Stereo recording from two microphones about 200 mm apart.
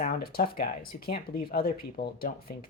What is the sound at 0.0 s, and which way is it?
Speech, 50° left (ahead or behind).